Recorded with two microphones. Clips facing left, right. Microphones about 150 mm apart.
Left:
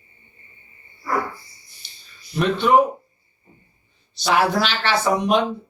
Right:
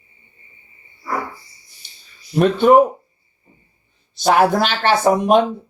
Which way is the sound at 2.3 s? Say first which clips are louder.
Right 7 dB; 45° right (ahead or behind).